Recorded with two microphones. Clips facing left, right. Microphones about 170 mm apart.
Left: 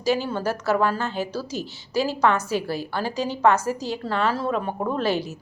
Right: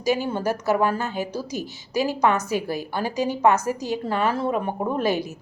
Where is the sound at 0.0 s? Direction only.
15° right (ahead or behind).